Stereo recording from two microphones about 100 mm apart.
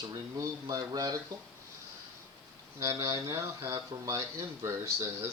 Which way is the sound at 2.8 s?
35° right (ahead or behind).